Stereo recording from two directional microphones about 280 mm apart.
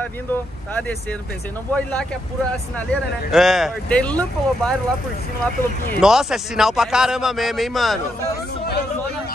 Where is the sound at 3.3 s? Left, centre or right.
Centre.